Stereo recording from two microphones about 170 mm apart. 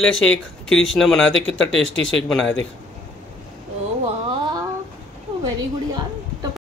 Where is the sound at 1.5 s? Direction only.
90° left.